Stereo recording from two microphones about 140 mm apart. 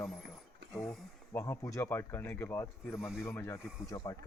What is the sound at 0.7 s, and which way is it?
Speech, 5° left (ahead or behind).